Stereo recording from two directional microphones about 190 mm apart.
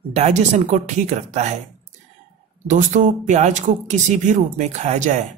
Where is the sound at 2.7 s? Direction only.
40° right (ahead or behind).